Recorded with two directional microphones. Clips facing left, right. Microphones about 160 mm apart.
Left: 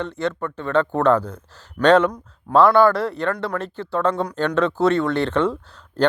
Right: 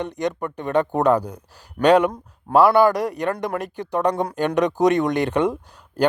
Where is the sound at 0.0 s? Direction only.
15° right (ahead or behind).